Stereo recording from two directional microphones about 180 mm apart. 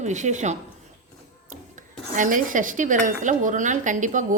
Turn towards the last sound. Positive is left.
turn(degrees=-45)  # may be behind; listen again after turning